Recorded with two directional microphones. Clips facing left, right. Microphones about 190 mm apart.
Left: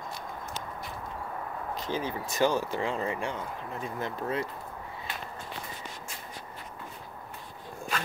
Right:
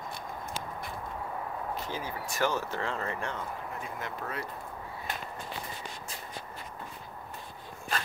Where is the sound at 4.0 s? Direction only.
25° left (ahead or behind).